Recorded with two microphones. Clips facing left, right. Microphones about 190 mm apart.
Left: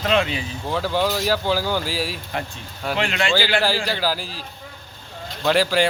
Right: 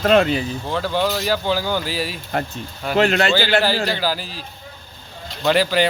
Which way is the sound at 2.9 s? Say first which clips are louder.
Right 7 dB; 40° right (ahead or behind).